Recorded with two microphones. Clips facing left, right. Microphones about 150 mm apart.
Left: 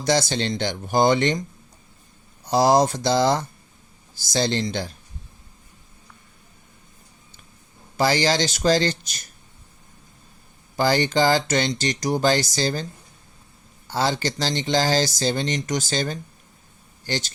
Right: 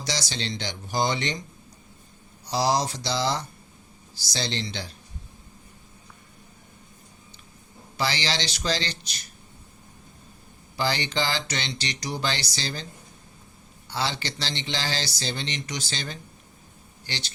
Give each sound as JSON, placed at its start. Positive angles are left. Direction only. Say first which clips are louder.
{"t": 0.0, "sound": "speech", "louder": "left 10 dB", "side_deg": 50}
{"t": 2.4, "sound": "speech", "louder": "left 7 dB", "side_deg": 50}
{"t": 7.9, "sound": "speech", "louder": "left 8 dB", "side_deg": 45}
{"t": 10.8, "sound": "speech", "louder": "left 7 dB", "side_deg": 45}